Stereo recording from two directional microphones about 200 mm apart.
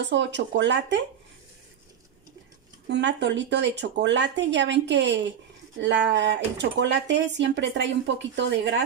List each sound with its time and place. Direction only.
0.0 s speech: 60° right (ahead or behind)
2.9 s speech: 60° right (ahead or behind)